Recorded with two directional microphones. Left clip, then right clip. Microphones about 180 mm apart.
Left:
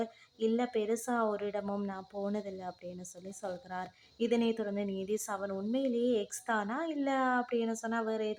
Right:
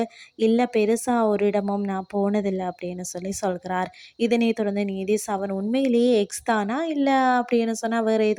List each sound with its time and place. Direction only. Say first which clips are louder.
0.0 s a woman's voice: right 11 dB; 40° right (ahead or behind)